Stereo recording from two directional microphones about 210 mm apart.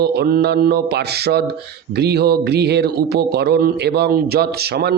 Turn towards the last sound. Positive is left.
turn(degrees=-50)  # may be behind; listen again after turning